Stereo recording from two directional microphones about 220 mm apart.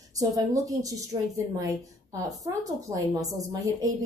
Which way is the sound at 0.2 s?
15° right (ahead or behind).